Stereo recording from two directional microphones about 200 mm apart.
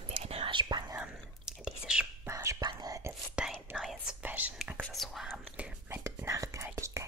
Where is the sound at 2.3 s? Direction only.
15° right (ahead or behind).